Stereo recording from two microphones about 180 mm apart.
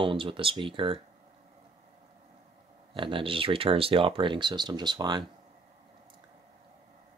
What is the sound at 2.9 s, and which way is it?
Speech, 30° right (ahead or behind).